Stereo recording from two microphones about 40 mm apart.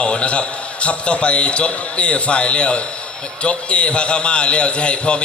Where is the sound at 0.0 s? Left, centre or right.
Left.